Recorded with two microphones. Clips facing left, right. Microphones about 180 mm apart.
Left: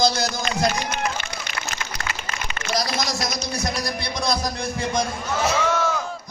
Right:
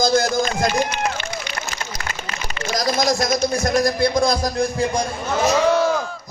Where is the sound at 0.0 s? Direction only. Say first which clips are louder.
Right 4 dB; 50° right (ahead or behind).